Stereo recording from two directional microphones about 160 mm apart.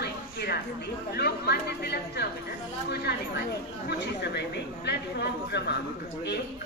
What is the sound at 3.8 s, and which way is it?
Speech, 90° left.